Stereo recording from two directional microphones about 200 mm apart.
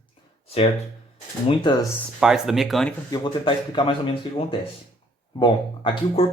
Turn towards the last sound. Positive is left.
turn(degrees=25)  # may be behind; listen again after turning